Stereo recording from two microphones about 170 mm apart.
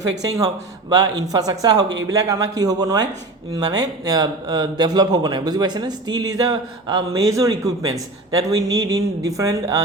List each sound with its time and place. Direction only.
0.2 s speech: 20° right (ahead or behind)